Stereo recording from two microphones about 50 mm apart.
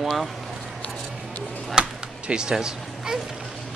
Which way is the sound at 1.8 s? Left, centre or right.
Right.